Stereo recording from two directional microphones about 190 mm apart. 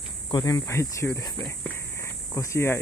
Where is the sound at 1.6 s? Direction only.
15° left (ahead or behind).